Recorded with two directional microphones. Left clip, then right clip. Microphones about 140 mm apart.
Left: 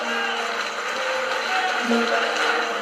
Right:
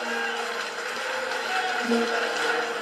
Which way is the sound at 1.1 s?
40° left (ahead or behind).